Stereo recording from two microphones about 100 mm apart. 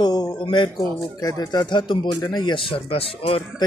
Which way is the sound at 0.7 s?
35° left (ahead or behind).